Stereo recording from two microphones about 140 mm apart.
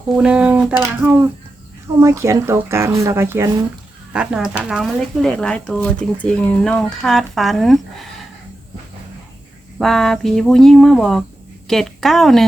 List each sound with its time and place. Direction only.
0.2 s speech: 10° right (ahead or behind)
4.1 s speech: 5° right (ahead or behind)
9.7 s speech: centre (ahead or behind)